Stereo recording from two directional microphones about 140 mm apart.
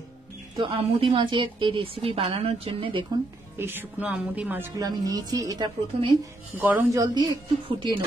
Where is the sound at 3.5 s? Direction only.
15° right (ahead or behind).